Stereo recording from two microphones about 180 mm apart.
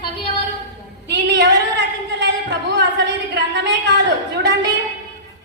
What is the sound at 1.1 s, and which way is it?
Speech, 75° right (ahead or behind).